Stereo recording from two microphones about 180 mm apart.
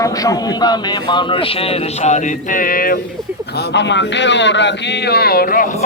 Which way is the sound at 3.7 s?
75° left (ahead or behind).